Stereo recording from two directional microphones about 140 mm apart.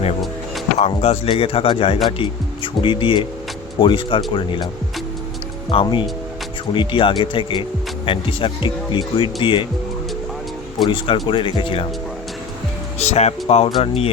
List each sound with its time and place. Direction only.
0.8 s speech: 45° left (ahead or behind)
5.7 s speech: 35° left (ahead or behind)
10.8 s speech: 35° left (ahead or behind)
13.0 s speech: 50° left (ahead or behind)